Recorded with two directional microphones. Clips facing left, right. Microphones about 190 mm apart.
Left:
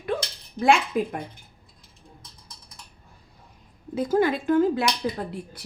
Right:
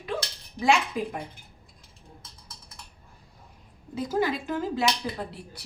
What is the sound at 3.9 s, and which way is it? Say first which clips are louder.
Speech: left 5 dB; 50° left (ahead or behind).